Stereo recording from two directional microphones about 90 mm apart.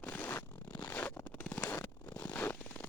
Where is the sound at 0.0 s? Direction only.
20° left (ahead or behind).